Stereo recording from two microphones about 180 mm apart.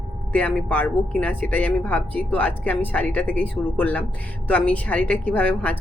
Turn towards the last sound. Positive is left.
turn(degrees=10)  # may be behind; listen again after turning